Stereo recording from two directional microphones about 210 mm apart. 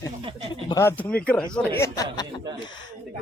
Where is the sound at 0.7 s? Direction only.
10° left (ahead or behind).